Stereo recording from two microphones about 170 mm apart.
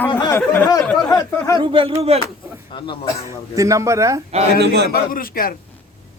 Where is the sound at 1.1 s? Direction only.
20° left (ahead or behind).